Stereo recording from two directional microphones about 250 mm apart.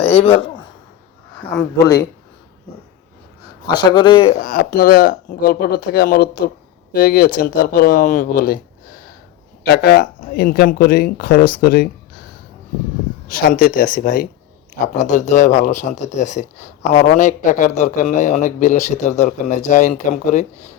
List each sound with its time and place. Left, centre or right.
0.0 s speech: left
3.7 s a man's voice: centre
4.4 s speech: left
9.6 s speech: left
13.3 s a man's voice: left